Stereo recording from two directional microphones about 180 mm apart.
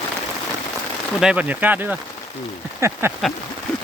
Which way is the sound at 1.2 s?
5° right (ahead or behind).